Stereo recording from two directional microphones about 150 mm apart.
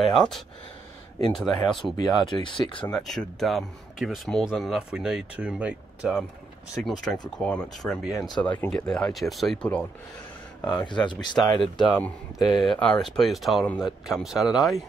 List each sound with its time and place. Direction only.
0.0 s speech: centre (ahead or behind)
2.4 s speech: 35° left (ahead or behind)
2.9 s speech: 5° left (ahead or behind)
10.7 s speech: 30° left (ahead or behind)
11.6 s speech: centre (ahead or behind)